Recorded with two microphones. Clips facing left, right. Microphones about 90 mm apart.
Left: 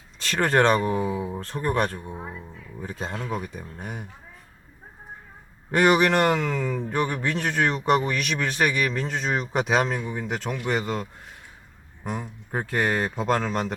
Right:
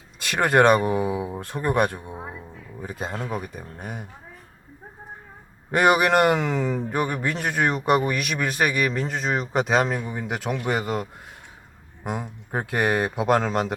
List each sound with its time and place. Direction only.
0.2 s speech: 15° right (ahead or behind)
5.7 s speech: 10° right (ahead or behind)
6.9 s speech: 5° right (ahead or behind)
9.8 s speech: 10° right (ahead or behind)
12.0 s speech: 20° right (ahead or behind)